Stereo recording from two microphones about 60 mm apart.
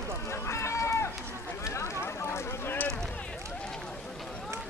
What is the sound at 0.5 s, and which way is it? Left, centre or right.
Run, left.